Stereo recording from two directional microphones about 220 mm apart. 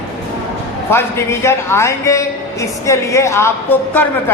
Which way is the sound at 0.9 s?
10° left (ahead or behind).